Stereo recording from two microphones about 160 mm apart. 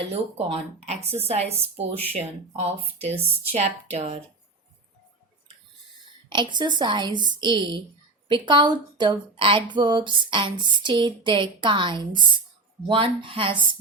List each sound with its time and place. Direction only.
0.1 s a woman's voice: 35° right (ahead or behind)
6.3 s a woman's voice: 30° right (ahead or behind)